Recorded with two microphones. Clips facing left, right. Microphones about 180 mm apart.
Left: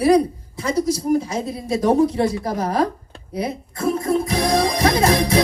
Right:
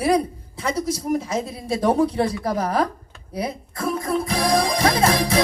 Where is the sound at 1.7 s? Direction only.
30° right (ahead or behind).